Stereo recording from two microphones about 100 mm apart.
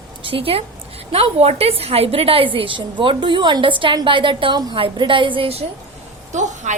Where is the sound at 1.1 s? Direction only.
90° right; by 5.6 s 65° right (ahead or behind).